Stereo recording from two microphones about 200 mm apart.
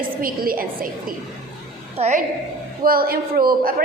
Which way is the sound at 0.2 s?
45° right (ahead or behind).